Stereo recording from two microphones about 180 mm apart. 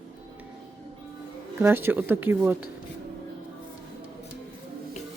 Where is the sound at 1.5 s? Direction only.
10° right (ahead or behind).